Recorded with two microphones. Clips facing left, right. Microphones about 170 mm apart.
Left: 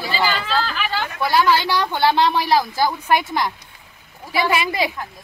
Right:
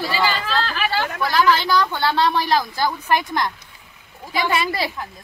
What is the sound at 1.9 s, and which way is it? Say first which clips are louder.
Speech: left 2 dB; 20° left (ahead or behind).